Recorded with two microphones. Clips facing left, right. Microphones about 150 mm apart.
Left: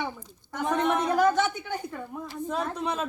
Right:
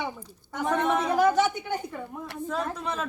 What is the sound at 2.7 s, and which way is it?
Speech, 20° left (ahead or behind).